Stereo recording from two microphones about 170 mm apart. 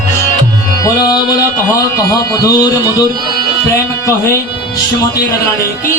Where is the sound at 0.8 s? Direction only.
20° left (ahead or behind).